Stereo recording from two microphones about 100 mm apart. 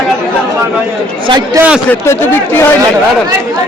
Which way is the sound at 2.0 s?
25° left (ahead or behind).